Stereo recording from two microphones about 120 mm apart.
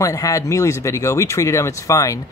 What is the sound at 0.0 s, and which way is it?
Speech, 25° left (ahead or behind).